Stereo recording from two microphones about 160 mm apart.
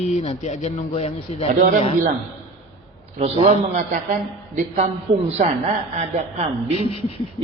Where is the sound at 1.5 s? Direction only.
50° right (ahead or behind).